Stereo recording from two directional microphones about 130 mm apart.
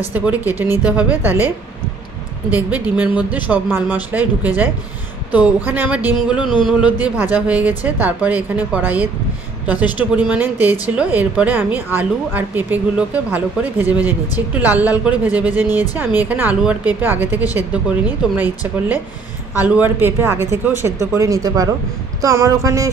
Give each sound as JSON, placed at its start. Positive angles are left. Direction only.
{"t": 0.1, "sound": "a woman's voice", "side_deg": -15}
{"t": 2.5, "sound": "a woman's voice", "side_deg": -10}
{"t": 5.7, "sound": "a woman's voice", "side_deg": -10}
{"t": 6.4, "sound": "music", "side_deg": 40}
{"t": 6.7, "sound": "a woman's voice", "side_deg": -10}
{"t": 19.6, "sound": "a woman's voice", "side_deg": -15}
{"t": 22.2, "sound": "a sound", "side_deg": -25}